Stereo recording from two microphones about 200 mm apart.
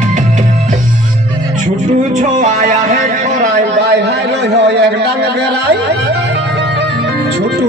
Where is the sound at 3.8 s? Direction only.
55° right (ahead or behind).